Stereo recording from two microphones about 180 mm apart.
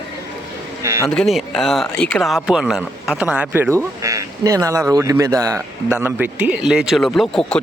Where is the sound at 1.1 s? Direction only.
Centre (ahead or behind).